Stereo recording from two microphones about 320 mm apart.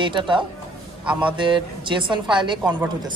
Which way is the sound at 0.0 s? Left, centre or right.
Centre.